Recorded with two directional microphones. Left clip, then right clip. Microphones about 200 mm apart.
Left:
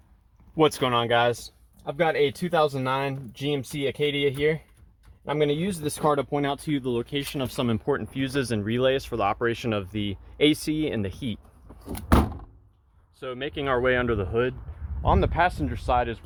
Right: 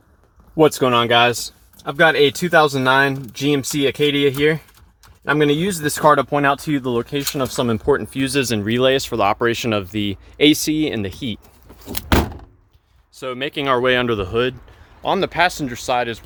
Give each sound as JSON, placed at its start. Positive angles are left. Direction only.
{"t": 0.5, "sound": "speech", "side_deg": -35}
{"t": 13.1, "sound": "speech", "side_deg": -20}